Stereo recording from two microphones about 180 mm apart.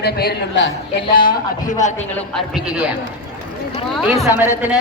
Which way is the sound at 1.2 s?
45° left (ahead or behind).